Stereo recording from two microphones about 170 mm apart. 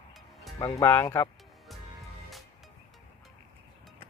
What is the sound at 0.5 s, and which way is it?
Speech, 15° left (ahead or behind).